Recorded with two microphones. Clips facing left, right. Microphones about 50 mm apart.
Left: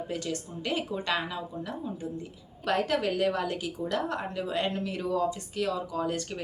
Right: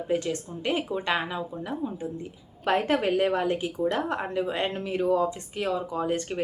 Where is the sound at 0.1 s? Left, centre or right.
Right.